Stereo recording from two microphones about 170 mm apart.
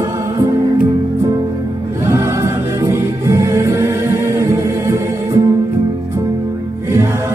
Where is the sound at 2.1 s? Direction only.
15° right (ahead or behind).